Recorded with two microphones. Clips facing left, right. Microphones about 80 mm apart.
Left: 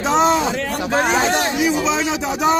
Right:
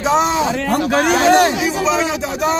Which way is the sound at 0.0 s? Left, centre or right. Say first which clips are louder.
Even; centre.